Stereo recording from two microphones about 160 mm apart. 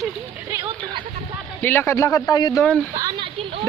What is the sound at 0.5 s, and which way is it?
Speech, 15° right (ahead or behind).